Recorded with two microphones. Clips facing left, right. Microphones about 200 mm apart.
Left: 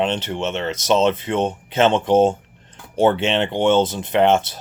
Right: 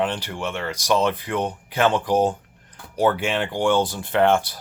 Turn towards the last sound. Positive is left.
turn(degrees=20)  # may be behind; listen again after turning